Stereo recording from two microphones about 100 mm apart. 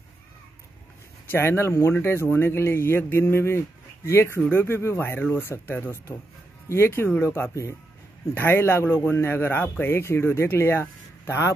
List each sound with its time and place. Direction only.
1.3 s speech: 25° left (ahead or behind)